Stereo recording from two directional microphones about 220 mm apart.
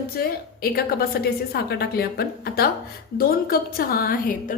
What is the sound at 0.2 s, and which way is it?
A woman's voice, 45° left (ahead or behind).